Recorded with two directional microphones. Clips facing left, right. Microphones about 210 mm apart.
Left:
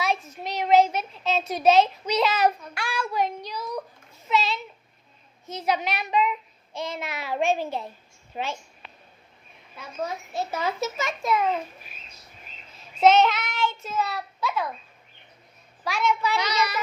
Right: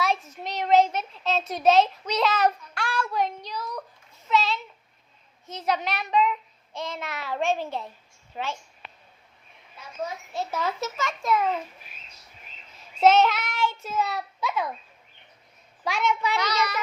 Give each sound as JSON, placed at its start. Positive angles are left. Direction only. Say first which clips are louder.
{"t": 0.0, "sound": "a child's voice", "louder": "even", "side_deg": 0}
{"t": 8.3, "sound": "a woman's voice", "louder": "left 1 dB", "side_deg": 20}
{"t": 10.3, "sound": "a child's voice", "louder": "even", "side_deg": 0}
{"t": 13.0, "sound": "a child's voice", "louder": "left 1 dB", "side_deg": -5}
{"t": 15.8, "sound": "a child's voice", "louder": "left 1 dB", "side_deg": -20}
{"t": 16.4, "sound": "a child's voice", "louder": "left 1 dB", "side_deg": 0}